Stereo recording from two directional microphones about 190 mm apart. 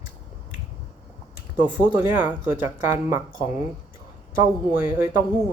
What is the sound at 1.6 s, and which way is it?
Speech, 10° right (ahead or behind).